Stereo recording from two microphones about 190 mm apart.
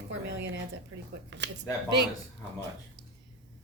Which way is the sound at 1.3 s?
70° right (ahead or behind).